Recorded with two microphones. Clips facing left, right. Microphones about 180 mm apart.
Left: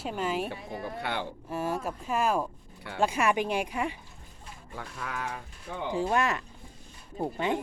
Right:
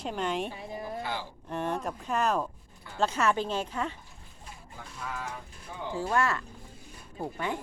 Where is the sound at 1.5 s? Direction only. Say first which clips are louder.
Even; 5° left (ahead or behind).